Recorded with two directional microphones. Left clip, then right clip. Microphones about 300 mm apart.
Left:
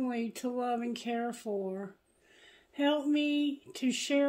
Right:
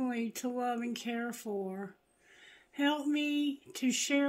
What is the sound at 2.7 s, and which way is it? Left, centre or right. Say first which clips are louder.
Speech: left 2 dB; right.